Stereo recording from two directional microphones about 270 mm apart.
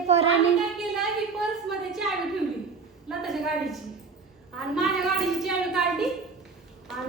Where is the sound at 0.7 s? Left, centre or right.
Centre.